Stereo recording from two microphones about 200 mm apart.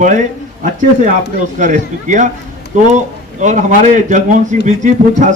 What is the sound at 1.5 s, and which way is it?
Speech, 40° right (ahead or behind).